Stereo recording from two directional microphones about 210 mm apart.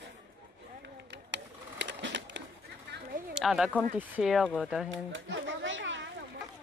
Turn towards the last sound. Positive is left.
turn(degrees=-60)  # may be behind; listen again after turning